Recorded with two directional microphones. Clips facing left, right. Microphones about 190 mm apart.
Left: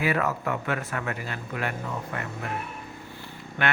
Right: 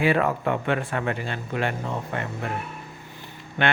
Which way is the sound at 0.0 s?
30° right (ahead or behind).